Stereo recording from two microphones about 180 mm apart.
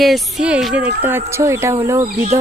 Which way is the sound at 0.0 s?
Centre (ahead or behind).